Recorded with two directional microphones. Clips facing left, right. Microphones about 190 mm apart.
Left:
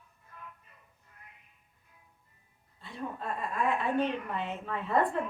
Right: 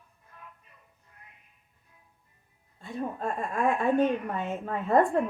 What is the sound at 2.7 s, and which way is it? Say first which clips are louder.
A woman's voice: right 5 dB; 45° right (ahead or behind).